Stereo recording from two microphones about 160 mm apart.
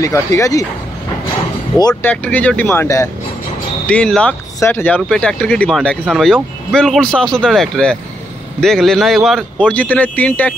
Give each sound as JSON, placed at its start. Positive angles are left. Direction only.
{"t": 0.0, "sound": "speech", "side_deg": 20}
{"t": 1.8, "sound": "speech", "side_deg": 25}
{"t": 2.0, "sound": "speech", "side_deg": 10}